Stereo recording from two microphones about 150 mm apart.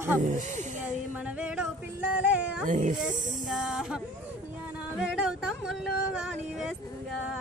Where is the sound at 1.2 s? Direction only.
5° right (ahead or behind).